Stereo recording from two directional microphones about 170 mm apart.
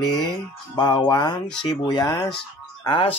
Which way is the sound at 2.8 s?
30° left (ahead or behind).